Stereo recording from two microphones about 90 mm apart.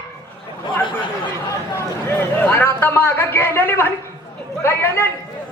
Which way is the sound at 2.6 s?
25° left (ahead or behind).